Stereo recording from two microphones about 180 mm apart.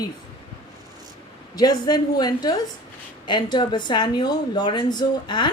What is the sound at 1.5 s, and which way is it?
A woman's voice, 20° left (ahead or behind).